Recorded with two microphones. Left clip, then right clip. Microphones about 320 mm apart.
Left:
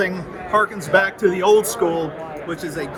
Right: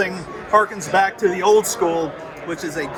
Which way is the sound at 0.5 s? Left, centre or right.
Centre.